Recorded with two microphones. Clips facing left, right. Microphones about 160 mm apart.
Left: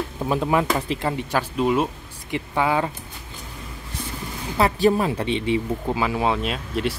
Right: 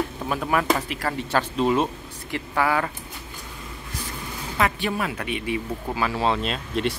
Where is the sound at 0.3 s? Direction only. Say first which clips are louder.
Left 3 dB; 25° left (ahead or behind).